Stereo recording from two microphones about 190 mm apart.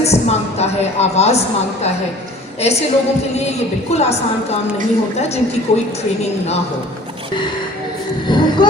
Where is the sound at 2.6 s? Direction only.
35° left (ahead or behind).